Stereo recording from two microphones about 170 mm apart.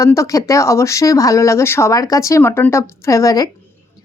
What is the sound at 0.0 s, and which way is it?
Speech, 15° left (ahead or behind).